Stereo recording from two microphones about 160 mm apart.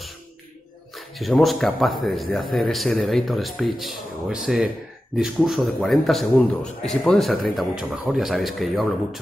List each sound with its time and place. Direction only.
0.9 s a man's voice: centre (ahead or behind)